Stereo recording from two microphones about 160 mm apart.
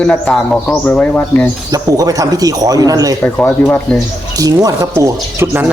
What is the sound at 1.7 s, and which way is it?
Speech, 20° right (ahead or behind).